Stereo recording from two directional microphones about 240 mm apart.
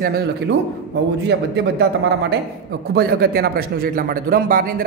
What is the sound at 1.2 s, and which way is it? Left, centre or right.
A man's voice, right.